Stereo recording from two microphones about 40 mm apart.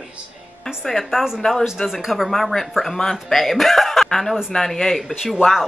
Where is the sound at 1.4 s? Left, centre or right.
Left.